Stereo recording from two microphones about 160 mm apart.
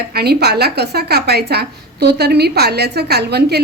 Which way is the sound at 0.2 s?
90° right.